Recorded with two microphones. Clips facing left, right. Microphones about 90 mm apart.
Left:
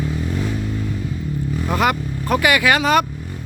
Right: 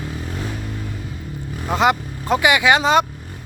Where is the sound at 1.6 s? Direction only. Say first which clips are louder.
Right 2 dB; 20° right (ahead or behind).